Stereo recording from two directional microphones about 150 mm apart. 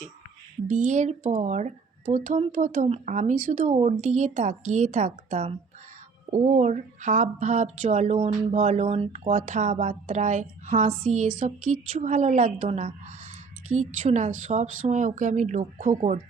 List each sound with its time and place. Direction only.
0.7 s speech: 55° right (ahead or behind)